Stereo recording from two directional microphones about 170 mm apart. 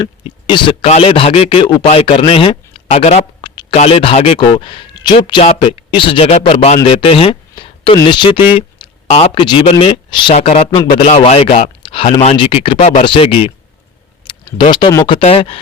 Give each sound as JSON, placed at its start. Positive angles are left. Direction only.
{"t": 0.0, "sound": "speech", "side_deg": 30}
{"t": 3.4, "sound": "a sound", "side_deg": 25}
{"t": 3.8, "sound": "speech", "side_deg": 35}